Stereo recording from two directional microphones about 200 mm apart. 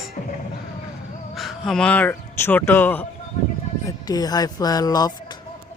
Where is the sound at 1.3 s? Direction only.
Centre (ahead or behind).